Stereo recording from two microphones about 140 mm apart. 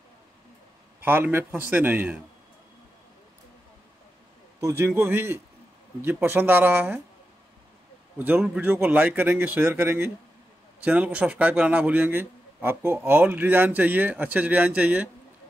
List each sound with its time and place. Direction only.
1.0 s speech: 15° right (ahead or behind)
4.6 s speech: 20° right (ahead or behind)
8.5 s speech: 15° right (ahead or behind)